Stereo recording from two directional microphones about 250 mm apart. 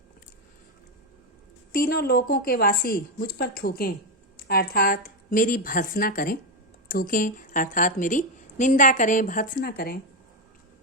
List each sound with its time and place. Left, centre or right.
1.7 s a woman's voice: left